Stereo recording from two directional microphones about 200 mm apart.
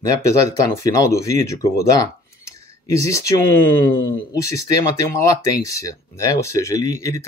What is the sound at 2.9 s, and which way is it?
Speech, 15° left (ahead or behind).